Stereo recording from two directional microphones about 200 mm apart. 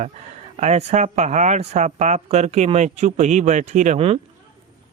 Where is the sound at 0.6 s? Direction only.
35° right (ahead or behind).